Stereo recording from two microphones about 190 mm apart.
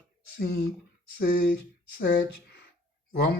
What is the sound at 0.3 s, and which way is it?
Speech, 60° left (ahead or behind).